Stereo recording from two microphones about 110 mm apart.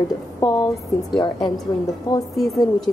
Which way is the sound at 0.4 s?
35° left (ahead or behind).